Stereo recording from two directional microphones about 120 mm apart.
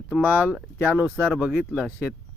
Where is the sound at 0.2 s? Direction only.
15° right (ahead or behind).